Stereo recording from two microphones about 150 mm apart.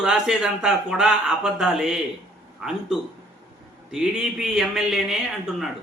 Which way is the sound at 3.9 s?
5° right (ahead or behind).